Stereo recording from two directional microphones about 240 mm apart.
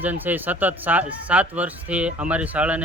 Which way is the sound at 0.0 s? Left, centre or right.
Centre.